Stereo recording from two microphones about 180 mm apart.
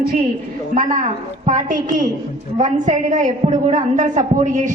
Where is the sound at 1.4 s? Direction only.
45° right (ahead or behind).